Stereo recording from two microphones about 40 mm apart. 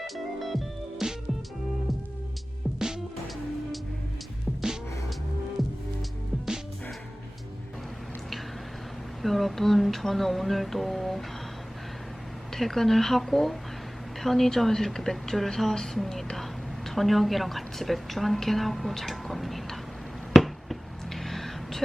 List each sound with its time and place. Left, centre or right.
0.0 s music: centre
2.7 s music: centre
9.2 s music: centre
12.5 s music: centre
14.2 s a woman's voice: centre
20.3 s a sound: centre